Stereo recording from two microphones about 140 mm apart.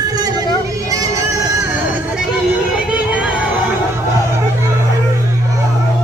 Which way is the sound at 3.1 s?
10° right (ahead or behind).